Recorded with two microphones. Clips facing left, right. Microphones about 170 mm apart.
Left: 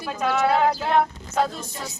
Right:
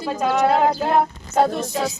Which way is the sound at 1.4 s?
80° right.